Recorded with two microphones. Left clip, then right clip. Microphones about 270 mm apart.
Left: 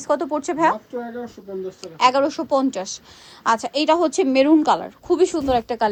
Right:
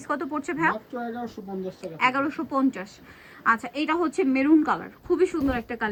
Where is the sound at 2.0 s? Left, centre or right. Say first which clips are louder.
Left 7 dB; left.